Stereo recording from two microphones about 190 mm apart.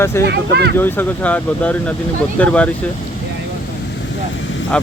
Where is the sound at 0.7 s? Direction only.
10° left (ahead or behind).